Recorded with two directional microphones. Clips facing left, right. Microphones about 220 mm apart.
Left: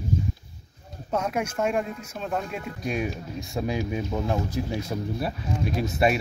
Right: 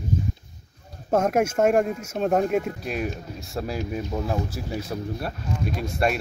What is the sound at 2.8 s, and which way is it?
Speech, centre (ahead or behind).